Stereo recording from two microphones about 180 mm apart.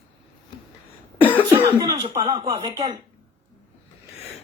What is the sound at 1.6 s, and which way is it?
Speech, 25° right (ahead or behind).